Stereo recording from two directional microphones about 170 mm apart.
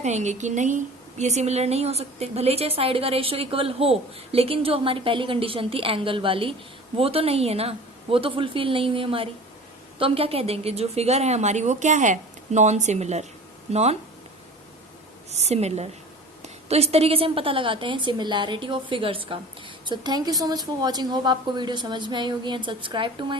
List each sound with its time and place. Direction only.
0.0 s a woman's voice: 45° right (ahead or behind)
15.3 s a woman's voice: 40° right (ahead or behind)